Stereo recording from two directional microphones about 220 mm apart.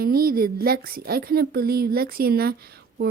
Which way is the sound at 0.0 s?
45° right (ahead or behind).